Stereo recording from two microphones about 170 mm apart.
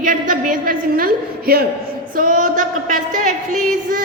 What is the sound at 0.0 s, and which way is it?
A woman's voice, 50° right (ahead or behind).